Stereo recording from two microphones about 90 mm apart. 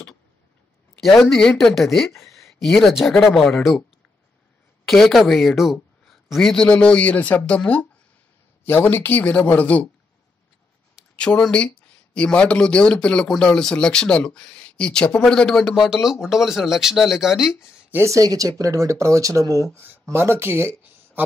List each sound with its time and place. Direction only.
1.0 s speech: 5° left (ahead or behind)
1.8 s speech: 5° left (ahead or behind)
4.8 s speech: 5° left (ahead or behind)
11.1 s speech: 10° left (ahead or behind)
15.6 s speech: 5° right (ahead or behind)
18.0 s speech: 40° right (ahead or behind)
19.7 s speech: 25° right (ahead or behind)